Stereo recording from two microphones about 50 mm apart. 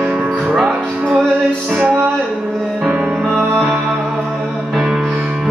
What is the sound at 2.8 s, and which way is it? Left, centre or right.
Music, centre.